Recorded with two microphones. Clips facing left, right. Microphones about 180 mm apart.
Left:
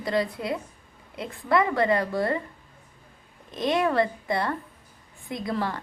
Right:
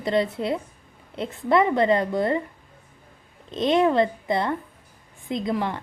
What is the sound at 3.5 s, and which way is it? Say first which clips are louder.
A woman's voice: right 4 dB; 20° right (ahead or behind).